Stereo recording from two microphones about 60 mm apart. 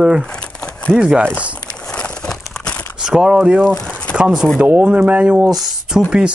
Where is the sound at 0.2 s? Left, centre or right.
Centre.